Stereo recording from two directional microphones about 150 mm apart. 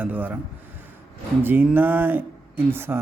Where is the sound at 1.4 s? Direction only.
15° right (ahead or behind).